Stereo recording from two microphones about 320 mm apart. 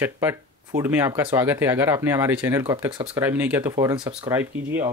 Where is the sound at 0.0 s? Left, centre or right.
Centre.